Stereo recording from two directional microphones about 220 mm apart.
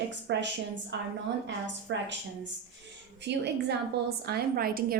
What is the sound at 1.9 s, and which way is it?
Speech, 55° right (ahead or behind).